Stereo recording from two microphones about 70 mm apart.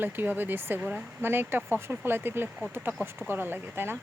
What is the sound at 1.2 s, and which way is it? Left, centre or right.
Speech, right.